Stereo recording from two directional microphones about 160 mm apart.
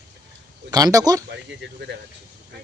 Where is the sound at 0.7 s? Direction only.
25° right (ahead or behind).